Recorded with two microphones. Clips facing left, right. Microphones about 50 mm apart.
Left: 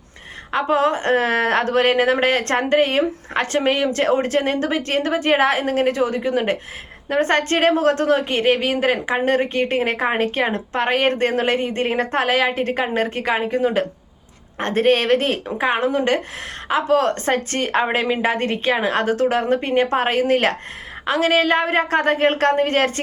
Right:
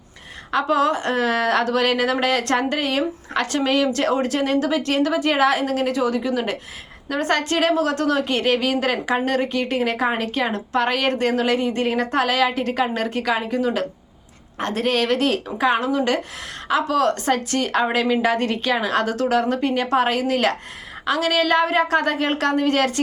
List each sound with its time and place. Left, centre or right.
0.5 s a woman's voice: left